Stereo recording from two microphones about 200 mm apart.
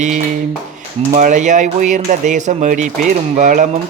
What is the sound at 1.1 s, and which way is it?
Speech, 35° right (ahead or behind).